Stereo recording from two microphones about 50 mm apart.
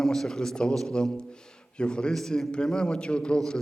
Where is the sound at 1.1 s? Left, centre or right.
Centre.